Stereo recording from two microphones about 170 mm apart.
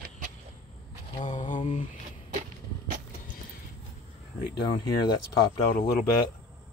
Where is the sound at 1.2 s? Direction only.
45° left (ahead or behind).